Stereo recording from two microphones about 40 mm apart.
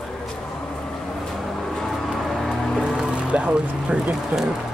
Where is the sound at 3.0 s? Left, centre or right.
Right.